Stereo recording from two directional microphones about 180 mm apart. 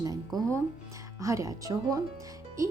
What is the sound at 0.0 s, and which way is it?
Speech, 20° right (ahead or behind).